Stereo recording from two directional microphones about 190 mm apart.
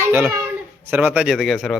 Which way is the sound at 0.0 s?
15° right (ahead or behind).